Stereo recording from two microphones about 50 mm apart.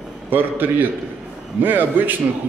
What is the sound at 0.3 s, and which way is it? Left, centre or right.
A man's voice, right.